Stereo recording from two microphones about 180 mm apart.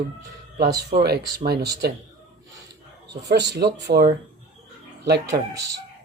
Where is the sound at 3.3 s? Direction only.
70° right (ahead or behind).